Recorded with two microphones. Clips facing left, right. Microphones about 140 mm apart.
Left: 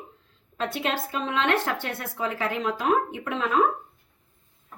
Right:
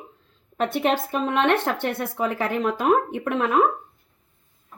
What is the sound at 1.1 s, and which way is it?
Speech, 55° right (ahead or behind).